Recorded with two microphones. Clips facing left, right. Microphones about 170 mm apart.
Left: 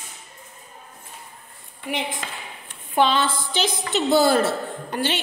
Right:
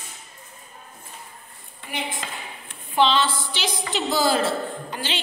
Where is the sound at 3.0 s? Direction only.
50° left (ahead or behind).